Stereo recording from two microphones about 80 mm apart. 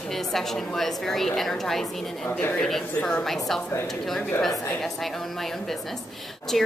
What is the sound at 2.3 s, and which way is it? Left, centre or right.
Speech, left.